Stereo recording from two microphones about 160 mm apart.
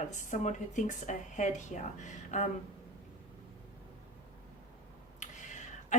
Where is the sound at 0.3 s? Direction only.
50° left (ahead or behind).